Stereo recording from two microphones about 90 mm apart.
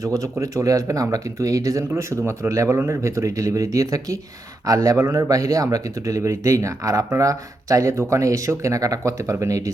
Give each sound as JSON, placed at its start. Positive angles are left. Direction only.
{"t": 0.0, "sound": "speech", "side_deg": -40}